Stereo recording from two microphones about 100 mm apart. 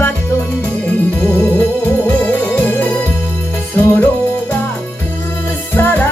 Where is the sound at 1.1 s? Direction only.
25° left (ahead or behind).